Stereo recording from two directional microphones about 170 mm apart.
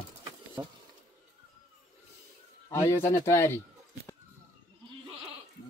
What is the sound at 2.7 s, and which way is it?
Speech, 20° left (ahead or behind).